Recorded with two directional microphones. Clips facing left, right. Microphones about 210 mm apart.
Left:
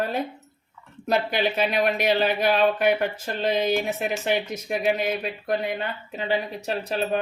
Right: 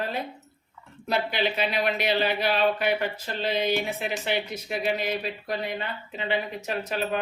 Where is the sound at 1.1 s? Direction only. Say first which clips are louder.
Left 3 dB; 45° left (ahead or behind).